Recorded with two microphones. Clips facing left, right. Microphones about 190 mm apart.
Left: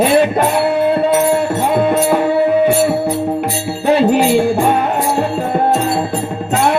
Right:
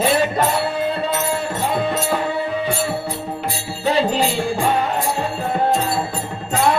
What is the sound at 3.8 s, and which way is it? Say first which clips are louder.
Music: left 6 dB; 55° left (ahead or behind).